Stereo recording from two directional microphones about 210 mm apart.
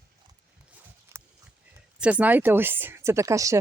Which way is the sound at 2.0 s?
5° right (ahead or behind).